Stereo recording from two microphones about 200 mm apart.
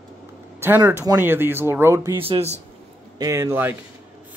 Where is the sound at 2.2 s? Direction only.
30° right (ahead or behind).